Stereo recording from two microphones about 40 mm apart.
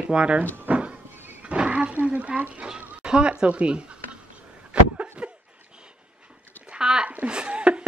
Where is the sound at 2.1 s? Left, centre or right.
Right.